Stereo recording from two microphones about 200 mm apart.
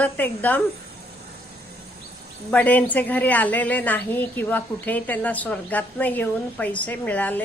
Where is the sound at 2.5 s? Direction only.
5° left (ahead or behind).